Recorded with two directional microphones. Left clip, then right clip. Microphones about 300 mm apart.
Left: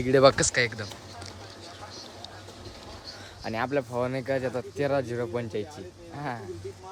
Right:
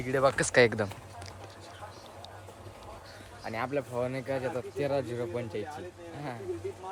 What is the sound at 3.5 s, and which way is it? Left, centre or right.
Speech, centre.